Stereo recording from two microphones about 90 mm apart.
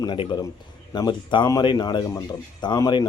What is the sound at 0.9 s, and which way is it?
A man's voice, 50° left (ahead or behind).